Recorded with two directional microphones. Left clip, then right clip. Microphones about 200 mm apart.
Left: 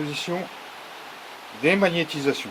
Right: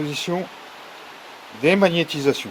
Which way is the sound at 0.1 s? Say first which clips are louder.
Right 3 dB; 45° right (ahead or behind).